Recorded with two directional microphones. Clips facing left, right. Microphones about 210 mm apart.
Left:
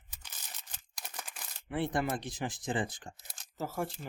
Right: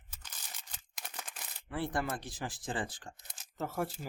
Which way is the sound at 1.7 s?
20° left (ahead or behind).